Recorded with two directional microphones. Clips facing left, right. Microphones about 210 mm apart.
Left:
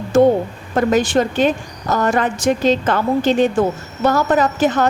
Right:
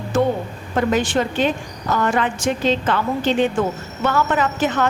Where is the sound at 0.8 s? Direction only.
40° left (ahead or behind).